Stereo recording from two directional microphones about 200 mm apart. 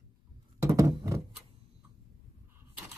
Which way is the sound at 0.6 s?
15° right (ahead or behind).